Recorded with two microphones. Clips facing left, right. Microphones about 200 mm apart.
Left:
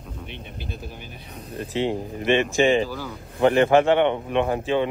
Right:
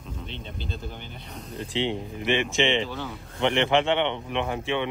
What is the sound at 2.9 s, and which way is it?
Speech, centre (ahead or behind).